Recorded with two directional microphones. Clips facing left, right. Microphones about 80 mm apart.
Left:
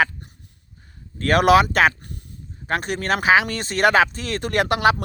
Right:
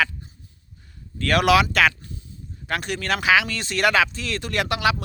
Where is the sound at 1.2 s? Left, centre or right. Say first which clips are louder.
Left 3 dB; left.